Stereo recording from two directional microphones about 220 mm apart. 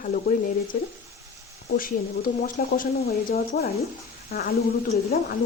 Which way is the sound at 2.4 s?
40° left (ahead or behind).